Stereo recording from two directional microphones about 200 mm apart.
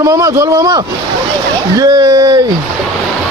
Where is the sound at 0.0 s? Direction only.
15° right (ahead or behind).